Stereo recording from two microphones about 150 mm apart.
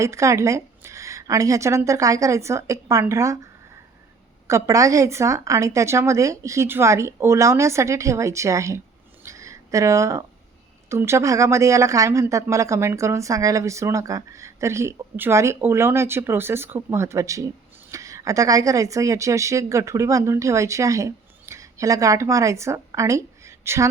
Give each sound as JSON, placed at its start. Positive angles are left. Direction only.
{"t": 0.0, "sound": "a woman's voice", "side_deg": -20}
{"t": 4.4, "sound": "a woman's voice", "side_deg": -20}
{"t": 9.2, "sound": "a sound", "side_deg": -20}
{"t": 10.8, "sound": "a woman's voice", "side_deg": -15}